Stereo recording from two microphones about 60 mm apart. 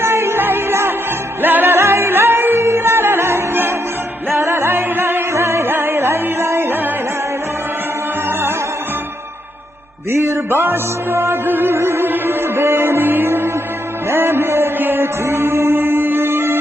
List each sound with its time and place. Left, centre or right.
0.0 s music: right
6.7 s music: right
8.3 s music: right
10.1 s music: right